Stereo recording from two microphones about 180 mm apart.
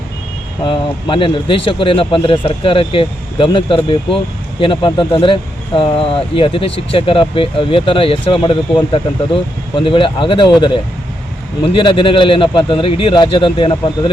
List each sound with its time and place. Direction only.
0.6 s speech: 25° left (ahead or behind)